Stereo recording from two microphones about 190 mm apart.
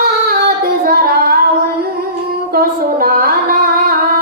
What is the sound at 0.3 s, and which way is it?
Female singing, 55° right (ahead or behind).